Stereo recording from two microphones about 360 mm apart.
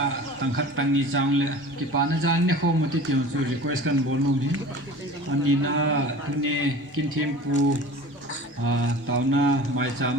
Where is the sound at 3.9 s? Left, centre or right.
Right.